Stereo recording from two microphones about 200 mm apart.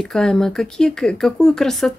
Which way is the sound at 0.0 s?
Centre (ahead or behind).